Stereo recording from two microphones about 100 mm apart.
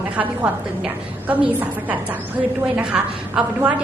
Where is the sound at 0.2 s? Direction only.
15° right (ahead or behind).